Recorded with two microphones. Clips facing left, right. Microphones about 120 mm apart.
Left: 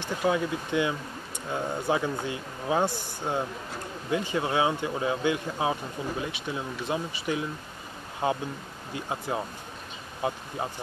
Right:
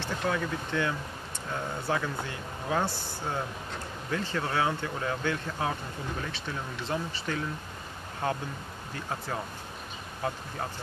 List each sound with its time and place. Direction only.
0.0 s speech: 15° left (ahead or behind)